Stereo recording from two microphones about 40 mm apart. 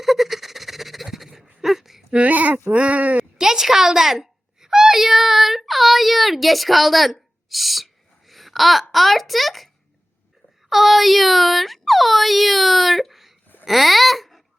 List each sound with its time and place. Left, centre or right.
0.0 s a sound: centre
1.6 s whimper: centre
2.1 s speech: right
3.4 s a child's voice: centre
10.7 s speech: centre
13.7 s babbling: centre